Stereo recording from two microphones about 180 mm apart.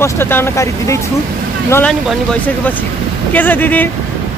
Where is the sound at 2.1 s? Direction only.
5° left (ahead or behind).